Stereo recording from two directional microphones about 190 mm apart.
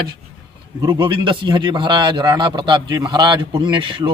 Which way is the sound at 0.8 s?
25° right (ahead or behind).